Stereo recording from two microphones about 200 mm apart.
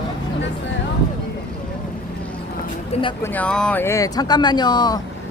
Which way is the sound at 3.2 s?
10° left (ahead or behind).